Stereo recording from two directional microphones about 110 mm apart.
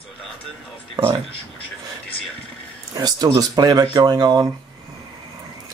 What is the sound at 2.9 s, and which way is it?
Speech, 35° right (ahead or behind).